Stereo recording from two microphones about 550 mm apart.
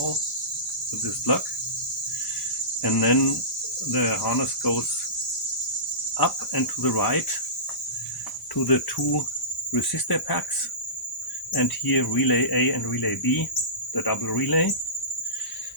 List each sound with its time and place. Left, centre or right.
2.8 s speech: left
6.1 s speech: left
8.6 s speech: left
11.5 s speech: left